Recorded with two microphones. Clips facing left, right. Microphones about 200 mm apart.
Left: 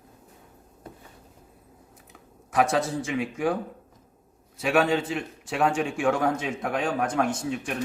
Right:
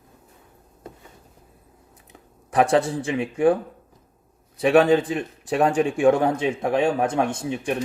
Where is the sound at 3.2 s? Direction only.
30° right (ahead or behind).